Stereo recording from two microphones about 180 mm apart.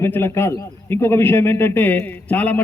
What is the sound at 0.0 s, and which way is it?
A man's voice, 15° left (ahead or behind).